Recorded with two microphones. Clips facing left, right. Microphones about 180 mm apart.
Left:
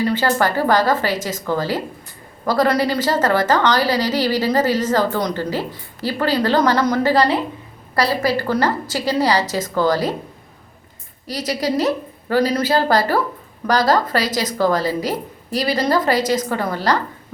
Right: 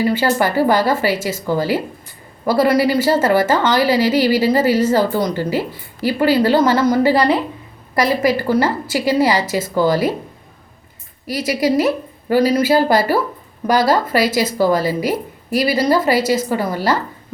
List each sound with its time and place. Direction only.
0.0 s a woman's voice: 10° right (ahead or behind)
11.3 s a woman's voice: 10° right (ahead or behind)